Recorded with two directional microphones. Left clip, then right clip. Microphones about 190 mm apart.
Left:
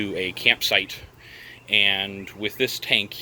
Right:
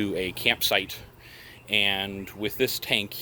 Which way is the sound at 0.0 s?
15° right (ahead or behind).